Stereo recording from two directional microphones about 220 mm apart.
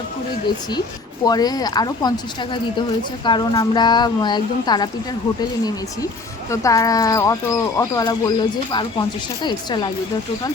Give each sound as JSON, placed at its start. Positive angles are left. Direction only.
{"t": 1.2, "sound": "speech", "side_deg": 15}